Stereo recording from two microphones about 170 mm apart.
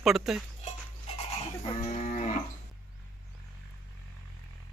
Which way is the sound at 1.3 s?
40° left (ahead or behind).